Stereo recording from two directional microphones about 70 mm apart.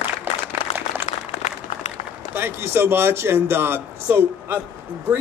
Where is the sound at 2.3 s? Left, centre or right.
Right.